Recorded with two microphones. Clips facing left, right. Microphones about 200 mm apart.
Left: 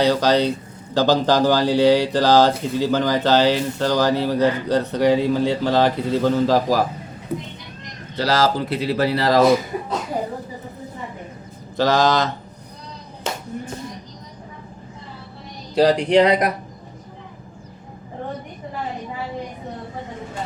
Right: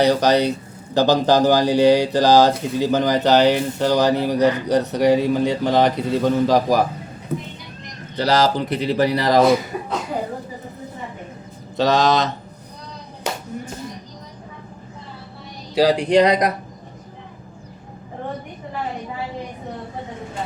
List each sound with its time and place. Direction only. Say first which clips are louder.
0.0 s speech: right 1 dB; 15° right (ahead or behind)
8.1 s speech: right 1 dB; 20° right (ahead or behind)
11.8 s speech: even; 20° right (ahead or behind)
15.7 s speech: even; 10° right (ahead or behind)